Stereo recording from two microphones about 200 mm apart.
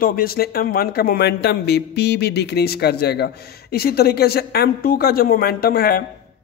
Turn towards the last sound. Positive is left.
turn(degrees=50)  # may be behind; listen again after turning